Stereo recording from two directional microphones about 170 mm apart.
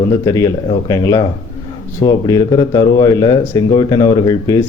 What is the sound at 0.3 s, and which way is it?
Speech, 20° left (ahead or behind).